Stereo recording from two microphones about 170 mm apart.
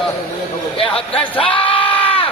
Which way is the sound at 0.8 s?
35° left (ahead or behind).